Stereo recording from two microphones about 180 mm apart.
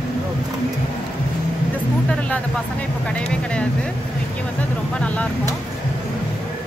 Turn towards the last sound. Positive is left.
turn(degrees=10)  # may be behind; listen again after turning